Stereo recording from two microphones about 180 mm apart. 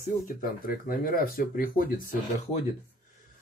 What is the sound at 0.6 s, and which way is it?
Speech, 50° left (ahead or behind).